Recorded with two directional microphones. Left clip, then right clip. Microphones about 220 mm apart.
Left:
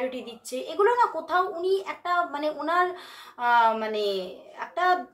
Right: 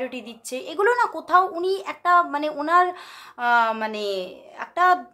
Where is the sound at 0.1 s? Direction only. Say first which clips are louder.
Right 2 dB; 45° right (ahead or behind).